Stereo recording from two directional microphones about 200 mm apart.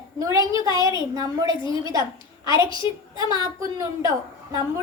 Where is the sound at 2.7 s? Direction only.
25° left (ahead or behind).